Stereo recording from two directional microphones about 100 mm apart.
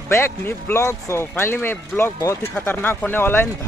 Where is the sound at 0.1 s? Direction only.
25° left (ahead or behind).